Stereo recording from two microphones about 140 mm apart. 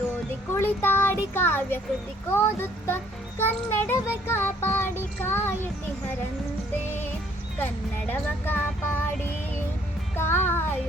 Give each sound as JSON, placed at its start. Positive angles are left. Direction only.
{"t": 0.5, "sound": "a child's voice", "side_deg": 15}
{"t": 7.6, "sound": "a child's voice", "side_deg": 15}
{"t": 10.2, "sound": "music", "side_deg": 15}